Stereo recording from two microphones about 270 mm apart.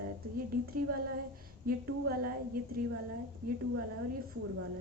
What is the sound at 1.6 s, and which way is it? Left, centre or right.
Speech, right.